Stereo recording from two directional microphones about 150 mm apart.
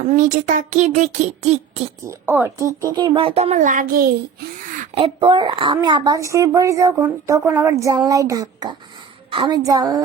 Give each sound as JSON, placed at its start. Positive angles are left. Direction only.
{"t": 0.0, "sound": "speech", "side_deg": -55}
{"t": 2.0, "sound": "speech", "side_deg": -15}
{"t": 4.9, "sound": "a woman's voice", "side_deg": -30}